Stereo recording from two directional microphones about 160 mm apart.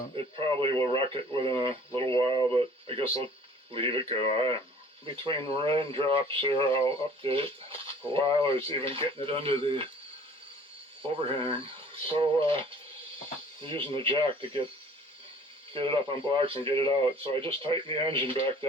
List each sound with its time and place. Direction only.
0.3 s speech: 35° right (ahead or behind)
11.3 s speech: 35° right (ahead or behind)
13.7 s speech: 30° right (ahead or behind)
15.7 s speech: 30° right (ahead or behind)